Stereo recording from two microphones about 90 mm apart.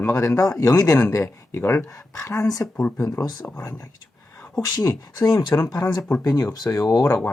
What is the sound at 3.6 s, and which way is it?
Whispering, 30° left (ahead or behind).